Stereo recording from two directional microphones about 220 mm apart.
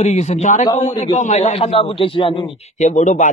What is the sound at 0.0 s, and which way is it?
A man's voice, 30° left (ahead or behind).